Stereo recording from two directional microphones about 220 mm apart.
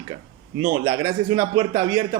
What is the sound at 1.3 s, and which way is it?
Speech, 20° right (ahead or behind).